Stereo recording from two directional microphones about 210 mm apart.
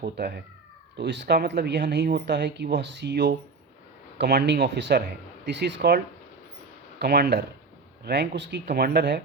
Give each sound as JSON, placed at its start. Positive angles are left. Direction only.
{"t": 0.0, "sound": "speech", "side_deg": -50}
{"t": 7.0, "sound": "speech", "side_deg": -50}